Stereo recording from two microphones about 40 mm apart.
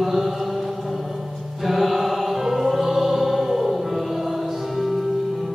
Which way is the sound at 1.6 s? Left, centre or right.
Centre.